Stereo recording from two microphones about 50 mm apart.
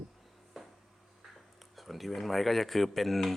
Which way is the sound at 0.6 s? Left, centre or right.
Centre.